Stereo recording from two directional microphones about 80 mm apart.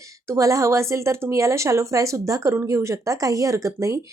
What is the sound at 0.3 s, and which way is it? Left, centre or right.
Speech, right.